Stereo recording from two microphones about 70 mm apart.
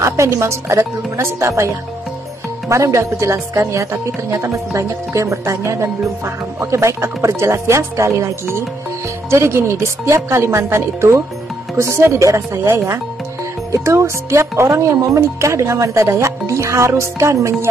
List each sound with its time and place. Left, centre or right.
0.0 s speech: right
2.7 s speech: right